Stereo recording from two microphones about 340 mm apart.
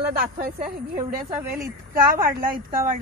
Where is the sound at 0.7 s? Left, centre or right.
Centre.